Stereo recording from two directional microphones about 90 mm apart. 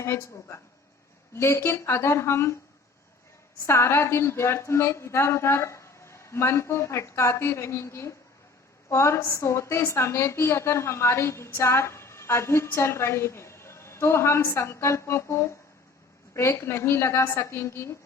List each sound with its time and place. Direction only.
0.0 s a woman's voice: 30° left (ahead or behind)
3.7 s a woman's voice: 30° left (ahead or behind)